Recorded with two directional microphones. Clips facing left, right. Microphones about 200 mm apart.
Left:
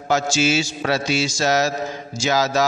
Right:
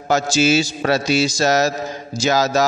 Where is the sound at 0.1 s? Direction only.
40° right (ahead or behind).